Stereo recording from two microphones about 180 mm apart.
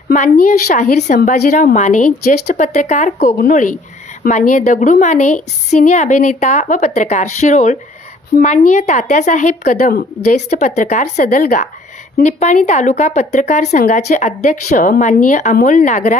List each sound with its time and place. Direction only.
0.7 s a woman's voice: 45° left (ahead or behind)